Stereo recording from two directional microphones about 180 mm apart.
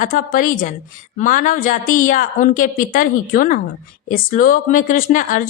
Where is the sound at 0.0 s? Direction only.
50° left (ahead or behind).